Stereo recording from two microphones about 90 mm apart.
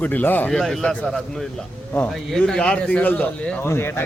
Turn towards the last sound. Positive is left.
turn(degrees=25)  # may be behind; listen again after turning